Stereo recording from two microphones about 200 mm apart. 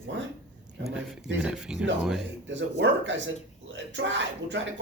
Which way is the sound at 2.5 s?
65° right (ahead or behind).